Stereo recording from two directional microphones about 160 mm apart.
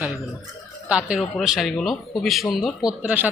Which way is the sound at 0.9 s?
5° right (ahead or behind).